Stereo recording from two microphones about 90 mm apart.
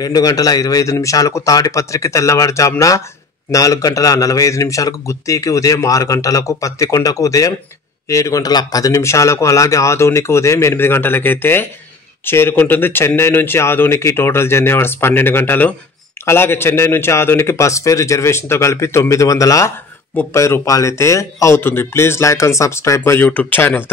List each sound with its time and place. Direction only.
0.0 s a man's voice: 45° left (ahead or behind)
23.2 s a man's voice: 20° left (ahead or behind)